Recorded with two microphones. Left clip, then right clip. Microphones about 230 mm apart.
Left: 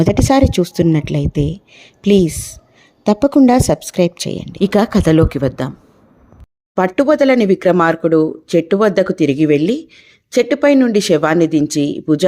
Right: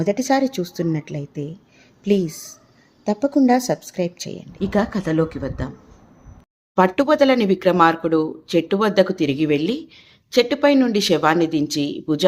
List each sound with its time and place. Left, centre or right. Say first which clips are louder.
0.0 s speech: left 6 dB; left
6.7 s speech: left 3 dB; left